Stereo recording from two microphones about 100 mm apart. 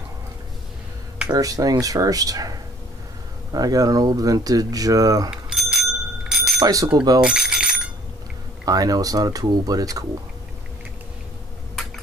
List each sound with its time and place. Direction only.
1.3 s speech: 35° right (ahead or behind)
5.5 s bicycle bell: 5° right (ahead or behind)
6.6 s speech: 35° right (ahead or behind)
7.2 s bicycle bell: 5° right (ahead or behind)
8.6 s speech: 40° right (ahead or behind)